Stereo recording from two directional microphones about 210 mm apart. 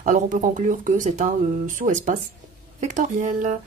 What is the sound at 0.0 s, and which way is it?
Speech, 40° right (ahead or behind).